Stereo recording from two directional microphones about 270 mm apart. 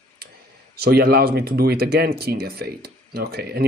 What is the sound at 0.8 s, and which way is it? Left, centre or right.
Speech, right.